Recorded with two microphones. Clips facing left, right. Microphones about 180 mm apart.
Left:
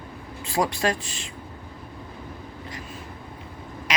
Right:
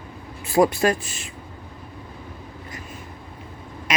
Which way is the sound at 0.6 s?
20° right (ahead or behind).